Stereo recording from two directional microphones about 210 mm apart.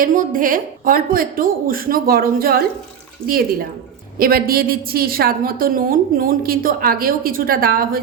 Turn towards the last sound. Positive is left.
turn(degrees=-45)  # may be behind; listen again after turning